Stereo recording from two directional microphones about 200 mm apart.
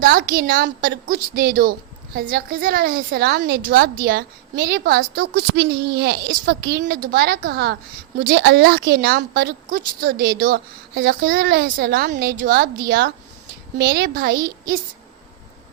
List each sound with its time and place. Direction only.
0.0 s a woman's voice: 45° right (ahead or behind)
13.7 s a woman's voice: 50° right (ahead or behind)